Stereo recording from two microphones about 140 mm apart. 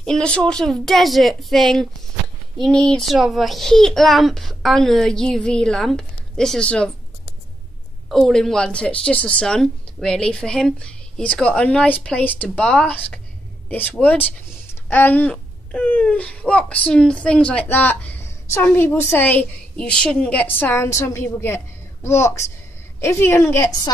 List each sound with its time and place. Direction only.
0.0 s a woman's voice: 5° left (ahead or behind)
8.1 s speech: centre (ahead or behind); by 23.9 s 20° left (ahead or behind)